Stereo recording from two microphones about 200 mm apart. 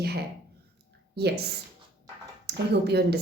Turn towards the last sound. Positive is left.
turn(degrees=-55)  # may be behind; listen again after turning